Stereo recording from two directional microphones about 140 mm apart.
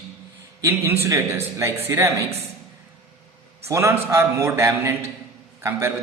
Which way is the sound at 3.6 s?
20° right (ahead or behind).